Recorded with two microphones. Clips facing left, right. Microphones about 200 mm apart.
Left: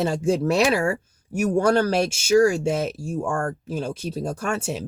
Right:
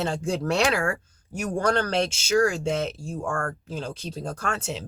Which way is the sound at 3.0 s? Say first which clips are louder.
Left 5 dB; 70° left (ahead or behind).